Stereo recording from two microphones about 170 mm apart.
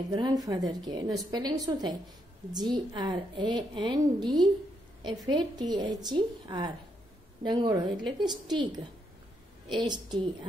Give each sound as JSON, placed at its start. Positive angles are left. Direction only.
{"t": 0.1, "sound": "a woman's voice", "side_deg": -25}